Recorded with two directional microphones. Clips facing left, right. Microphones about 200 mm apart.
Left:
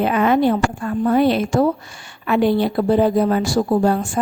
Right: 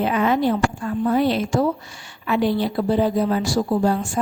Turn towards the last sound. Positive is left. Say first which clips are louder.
# left 3 dB
turn(degrees=55)  # may be behind; listen again after turning